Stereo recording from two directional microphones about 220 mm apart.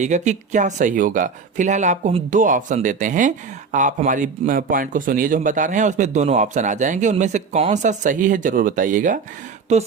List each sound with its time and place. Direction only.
0.0 s speech: 35° right (ahead or behind)